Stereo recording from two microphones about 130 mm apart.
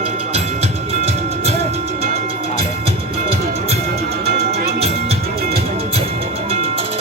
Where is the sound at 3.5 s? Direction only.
55° right (ahead or behind).